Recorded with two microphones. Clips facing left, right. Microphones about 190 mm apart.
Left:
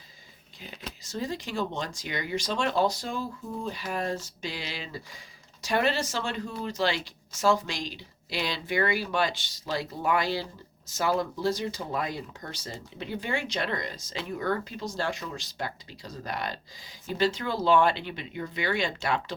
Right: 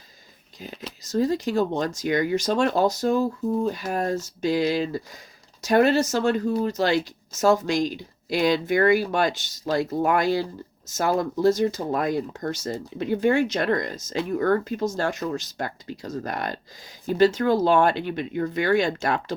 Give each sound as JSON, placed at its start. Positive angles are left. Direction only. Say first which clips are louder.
{"t": 0.6, "sound": "speech", "louder": "right 5 dB", "side_deg": -45}